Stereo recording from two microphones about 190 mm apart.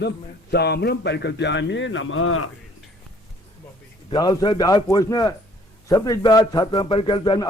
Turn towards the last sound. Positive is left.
turn(degrees=25)  # may be behind; listen again after turning